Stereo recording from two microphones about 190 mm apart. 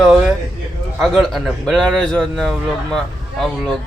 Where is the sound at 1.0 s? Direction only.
Centre (ahead or behind).